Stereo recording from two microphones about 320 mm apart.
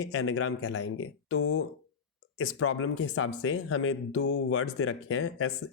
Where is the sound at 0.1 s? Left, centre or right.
Left.